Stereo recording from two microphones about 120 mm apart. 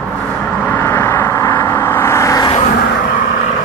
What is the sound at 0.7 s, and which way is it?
Vehicle, 15° left (ahead or behind).